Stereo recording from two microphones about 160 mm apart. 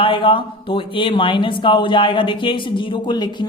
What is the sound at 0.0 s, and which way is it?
Speech, 30° left (ahead or behind).